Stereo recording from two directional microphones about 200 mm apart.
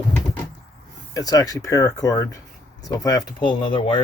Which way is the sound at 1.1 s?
20° left (ahead or behind).